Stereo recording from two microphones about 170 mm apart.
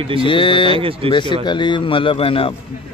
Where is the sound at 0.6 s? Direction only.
30° right (ahead or behind).